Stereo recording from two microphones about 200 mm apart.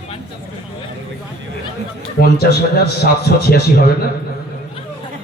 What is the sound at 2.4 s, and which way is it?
A man's voice, 50° left (ahead or behind).